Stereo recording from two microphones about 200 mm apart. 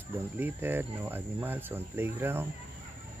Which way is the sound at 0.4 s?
10° right (ahead or behind).